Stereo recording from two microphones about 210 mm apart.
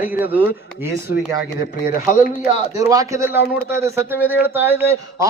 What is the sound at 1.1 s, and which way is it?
Speech, 90° left.